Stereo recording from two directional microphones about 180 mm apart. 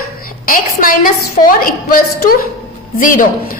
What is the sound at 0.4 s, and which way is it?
A woman's voice, 50° left (ahead or behind).